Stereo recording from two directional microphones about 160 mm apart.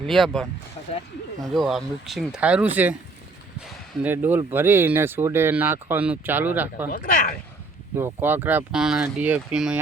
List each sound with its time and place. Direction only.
0.0 s speech: 5° left (ahead or behind)
1.5 s speech: centre (ahead or behind)
4.0 s speech: 10° right (ahead or behind)
6.9 s speech: 60° left (ahead or behind)
7.9 s speech: 15° right (ahead or behind)